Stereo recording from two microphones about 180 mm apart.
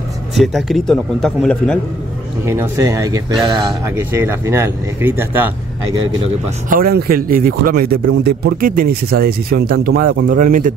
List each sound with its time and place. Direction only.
0.3 s a man's voice: centre (ahead or behind)
2.4 s speech: 15° right (ahead or behind)
6.7 s speech: 55° right (ahead or behind)